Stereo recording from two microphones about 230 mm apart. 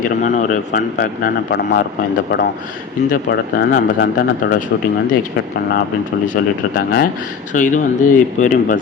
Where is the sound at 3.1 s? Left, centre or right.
Left.